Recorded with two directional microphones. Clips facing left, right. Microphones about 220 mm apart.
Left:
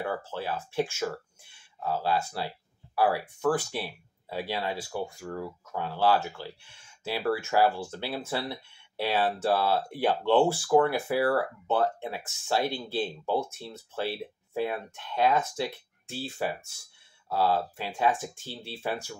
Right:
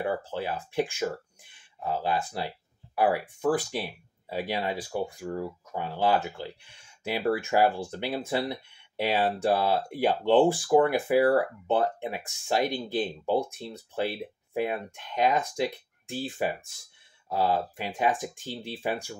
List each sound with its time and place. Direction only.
0.0 s speech: 15° right (ahead or behind)